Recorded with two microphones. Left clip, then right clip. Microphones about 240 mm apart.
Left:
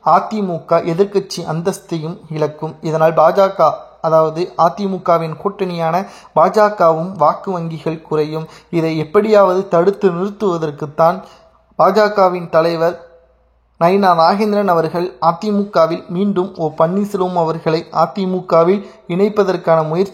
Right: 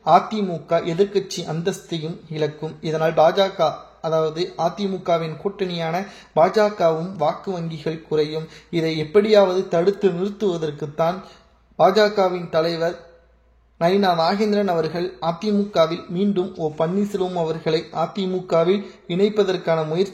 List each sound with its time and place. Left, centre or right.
0.0 s speech: centre